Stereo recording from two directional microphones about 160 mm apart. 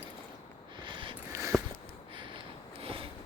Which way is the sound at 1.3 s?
20° right (ahead or behind).